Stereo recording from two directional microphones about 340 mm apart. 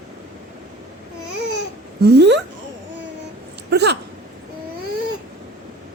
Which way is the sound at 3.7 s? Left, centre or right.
Right.